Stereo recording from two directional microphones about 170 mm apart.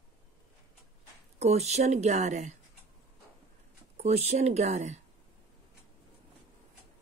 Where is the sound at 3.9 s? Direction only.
40° right (ahead or behind).